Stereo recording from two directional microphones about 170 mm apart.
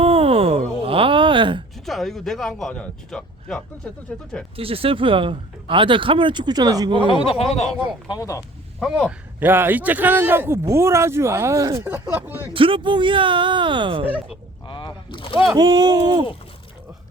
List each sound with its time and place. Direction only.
0.0 s a sound: 35° right (ahead or behind)
1.8 s speech: centre (ahead or behind)
4.5 s speech: 35° right (ahead or behind)
7.1 s speech: 30° left (ahead or behind)
8.8 s a man's voice: centre (ahead or behind)
12.5 s speech: 30° right (ahead or behind)
14.7 s speech: 30° left (ahead or behind)
15.5 s speech: 25° right (ahead or behind)